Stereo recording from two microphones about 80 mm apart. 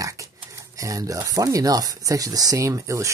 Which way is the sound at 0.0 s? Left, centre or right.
Right.